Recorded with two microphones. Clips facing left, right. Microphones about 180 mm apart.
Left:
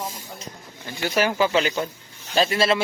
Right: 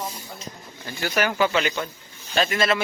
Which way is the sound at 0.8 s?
25° left (ahead or behind).